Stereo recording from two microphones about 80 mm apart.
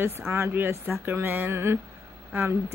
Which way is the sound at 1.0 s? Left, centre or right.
Right.